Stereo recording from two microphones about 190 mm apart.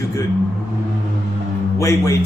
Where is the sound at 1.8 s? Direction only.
15° left (ahead or behind).